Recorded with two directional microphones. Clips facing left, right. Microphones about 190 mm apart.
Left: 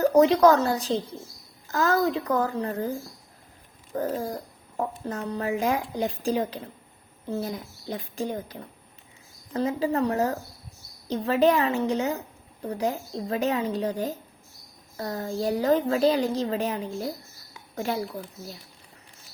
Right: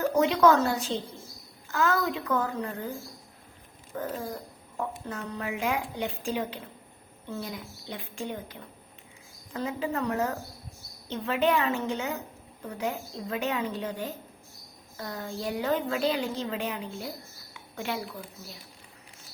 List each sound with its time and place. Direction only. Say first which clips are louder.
0.0 s a woman's voice: left 5 dB; 40° left (ahead or behind)
3.9 s a woman's voice: left 5 dB; 40° left (ahead or behind)
17.5 s a sound: left 4 dB; 40° left (ahead or behind)